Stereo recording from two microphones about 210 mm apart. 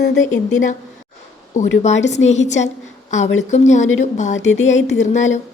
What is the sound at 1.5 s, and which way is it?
A woman's voice, 35° left (ahead or behind).